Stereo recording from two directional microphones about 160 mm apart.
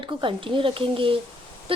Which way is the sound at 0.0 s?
30° right (ahead or behind).